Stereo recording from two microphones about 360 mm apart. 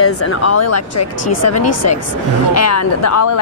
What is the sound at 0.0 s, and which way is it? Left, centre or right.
A woman's voice, left.